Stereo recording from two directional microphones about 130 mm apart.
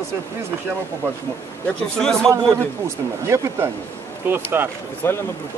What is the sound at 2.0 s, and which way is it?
Speech, 5° left (ahead or behind).